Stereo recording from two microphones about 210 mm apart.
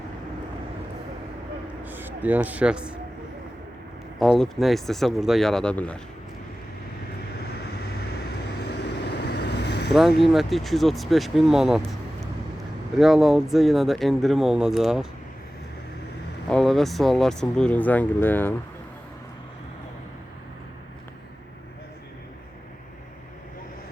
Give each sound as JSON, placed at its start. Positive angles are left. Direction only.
{"t": 1.8, "sound": "speech", "side_deg": -10}
{"t": 4.2, "sound": "speech", "side_deg": 0}
{"t": 8.7, "sound": "vehicle", "side_deg": 55}
{"t": 9.9, "sound": "speech", "side_deg": 0}
{"t": 13.0, "sound": "speech", "side_deg": 0}
{"t": 16.5, "sound": "speech", "side_deg": 0}